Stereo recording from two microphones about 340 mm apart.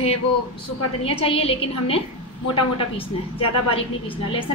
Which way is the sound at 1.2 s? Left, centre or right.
Centre.